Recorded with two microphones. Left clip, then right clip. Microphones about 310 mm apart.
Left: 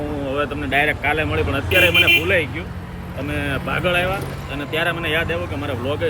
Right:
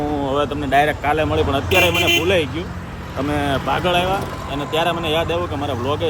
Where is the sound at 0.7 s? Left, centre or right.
Right.